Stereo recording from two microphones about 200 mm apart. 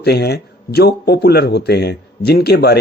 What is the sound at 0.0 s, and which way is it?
Speech, 55° left (ahead or behind).